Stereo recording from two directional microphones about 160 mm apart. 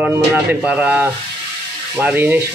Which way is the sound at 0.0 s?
15° right (ahead or behind).